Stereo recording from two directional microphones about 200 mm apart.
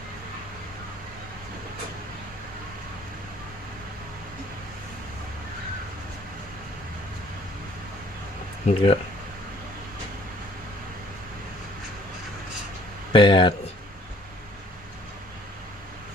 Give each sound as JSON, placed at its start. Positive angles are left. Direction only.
{"t": 8.6, "sound": "speech", "side_deg": 30}
{"t": 13.1, "sound": "speech", "side_deg": 25}